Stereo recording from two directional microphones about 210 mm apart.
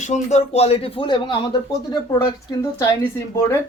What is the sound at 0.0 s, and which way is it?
Speech, 35° left (ahead or behind).